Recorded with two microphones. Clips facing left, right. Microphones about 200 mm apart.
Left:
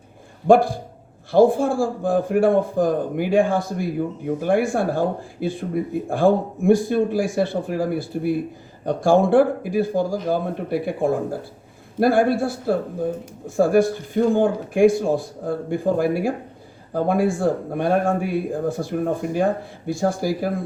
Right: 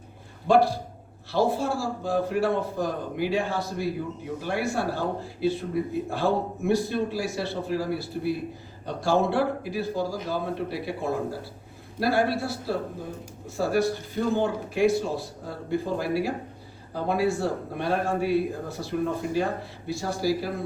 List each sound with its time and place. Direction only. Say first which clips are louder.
0.4 s speech: left 5 dB; 50° left (ahead or behind)